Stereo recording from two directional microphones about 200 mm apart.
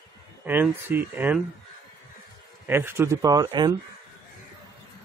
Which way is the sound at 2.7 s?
10° right (ahead or behind).